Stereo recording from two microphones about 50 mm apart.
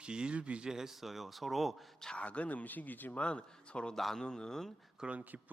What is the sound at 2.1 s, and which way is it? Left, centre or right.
Speech, left.